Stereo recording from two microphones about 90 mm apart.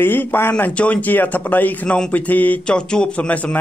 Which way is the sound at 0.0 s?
25° left (ahead or behind).